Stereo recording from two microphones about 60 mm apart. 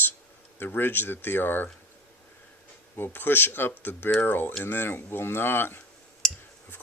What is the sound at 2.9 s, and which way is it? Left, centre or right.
Speech, left.